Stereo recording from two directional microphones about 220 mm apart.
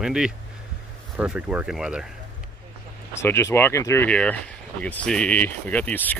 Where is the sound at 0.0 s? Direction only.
5° right (ahead or behind).